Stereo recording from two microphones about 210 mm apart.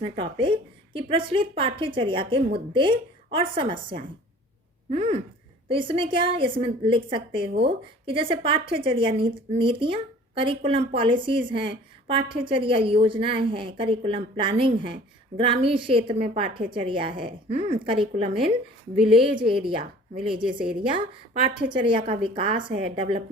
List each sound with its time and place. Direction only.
0.0 s a woman's voice: 25° right (ahead or behind)
18.9 s a woman's voice: 5° right (ahead or behind)
19.2 s a woman's voice: 25° right (ahead or behind)
20.3 s a woman's voice: 5° right (ahead or behind)
21.5 s a woman's voice: 25° right (ahead or behind)